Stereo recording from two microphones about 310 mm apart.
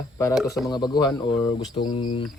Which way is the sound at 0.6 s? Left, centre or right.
Centre.